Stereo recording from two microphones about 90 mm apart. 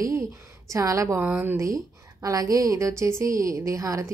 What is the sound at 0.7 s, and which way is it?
Speech, 35° right (ahead or behind).